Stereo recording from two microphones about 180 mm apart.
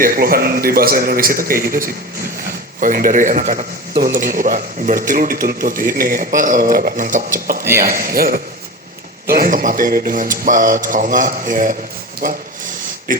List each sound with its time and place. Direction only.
0.0 s speech: 55° right (ahead or behind)
7.6 s speech: 15° right (ahead or behind)
7.9 s speech: 55° right (ahead or behind)